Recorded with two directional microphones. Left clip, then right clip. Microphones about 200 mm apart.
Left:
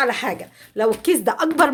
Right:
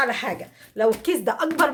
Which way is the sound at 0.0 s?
50° left (ahead or behind).